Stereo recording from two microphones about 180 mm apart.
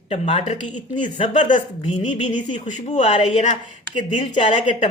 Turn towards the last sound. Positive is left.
turn(degrees=30)  # may be behind; listen again after turning